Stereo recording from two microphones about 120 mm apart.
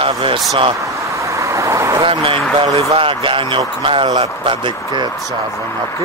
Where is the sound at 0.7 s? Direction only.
25° right (ahead or behind).